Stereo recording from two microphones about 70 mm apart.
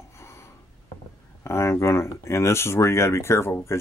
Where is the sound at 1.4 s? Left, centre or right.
Left.